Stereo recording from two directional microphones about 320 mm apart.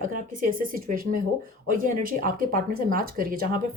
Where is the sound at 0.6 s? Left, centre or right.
Right.